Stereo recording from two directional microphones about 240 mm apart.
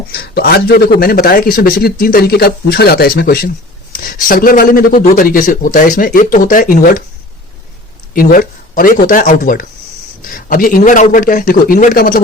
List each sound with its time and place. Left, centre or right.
0.1 s a man's voice: left
8.1 s a man's voice: left